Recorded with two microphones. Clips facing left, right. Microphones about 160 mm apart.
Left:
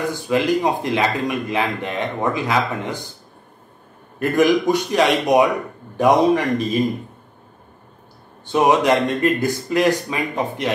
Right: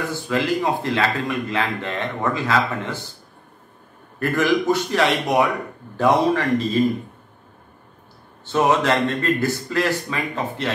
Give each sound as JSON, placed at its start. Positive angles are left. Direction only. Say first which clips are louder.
{"t": 0.1, "sound": "a man's voice", "louder": "left 3 dB", "side_deg": 15}
{"t": 4.2, "sound": "a man's voice", "louder": "left 3 dB", "side_deg": 20}
{"t": 8.5, "sound": "a man's voice", "louder": "left 3 dB", "side_deg": 15}